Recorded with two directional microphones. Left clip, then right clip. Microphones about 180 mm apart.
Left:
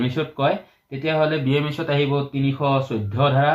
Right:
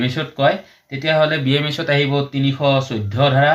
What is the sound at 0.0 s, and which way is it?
Speech, 20° right (ahead or behind).